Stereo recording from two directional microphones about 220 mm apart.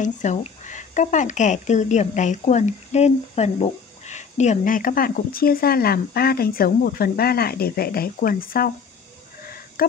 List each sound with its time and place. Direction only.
0.0 s speech: 35° left (ahead or behind)
9.8 s speech: 40° left (ahead or behind)